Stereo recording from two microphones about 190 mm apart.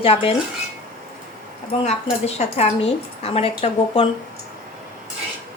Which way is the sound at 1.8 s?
35° left (ahead or behind).